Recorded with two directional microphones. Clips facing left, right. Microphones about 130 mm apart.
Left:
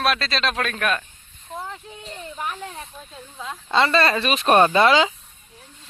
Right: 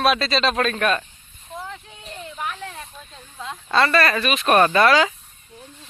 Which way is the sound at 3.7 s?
20° left (ahead or behind).